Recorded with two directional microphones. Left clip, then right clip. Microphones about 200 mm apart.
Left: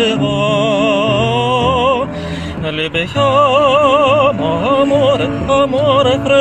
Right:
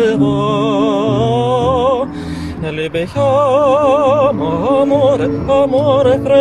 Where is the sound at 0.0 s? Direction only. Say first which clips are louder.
Right 1 dB; 40° right (ahead or behind).